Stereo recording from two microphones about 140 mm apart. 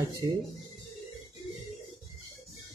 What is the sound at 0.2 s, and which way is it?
Speech, 30° right (ahead or behind).